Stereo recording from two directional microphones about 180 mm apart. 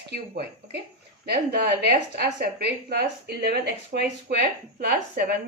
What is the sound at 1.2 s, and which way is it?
Speech, 60° right (ahead or behind).